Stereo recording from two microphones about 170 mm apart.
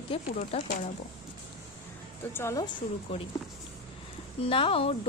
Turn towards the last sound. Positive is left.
turn(degrees=35)  # may be behind; listen again after turning